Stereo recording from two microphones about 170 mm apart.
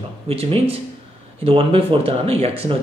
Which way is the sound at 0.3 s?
35° right (ahead or behind).